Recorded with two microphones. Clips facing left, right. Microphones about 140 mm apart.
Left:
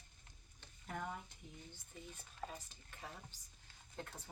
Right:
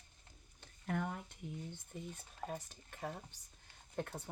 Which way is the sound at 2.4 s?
55° right (ahead or behind).